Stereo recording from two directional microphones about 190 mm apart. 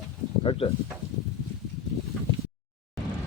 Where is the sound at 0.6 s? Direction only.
30° left (ahead or behind).